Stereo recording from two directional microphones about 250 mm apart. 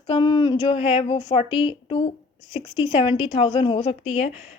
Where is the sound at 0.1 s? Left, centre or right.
Centre.